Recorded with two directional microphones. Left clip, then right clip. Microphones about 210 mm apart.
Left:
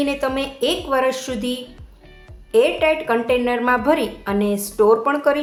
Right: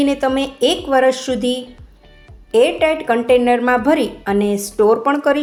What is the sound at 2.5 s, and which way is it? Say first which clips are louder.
A woman's voice: right 2 dB; 15° right (ahead or behind).